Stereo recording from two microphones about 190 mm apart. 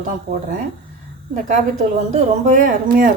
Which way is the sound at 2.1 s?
40° right (ahead or behind).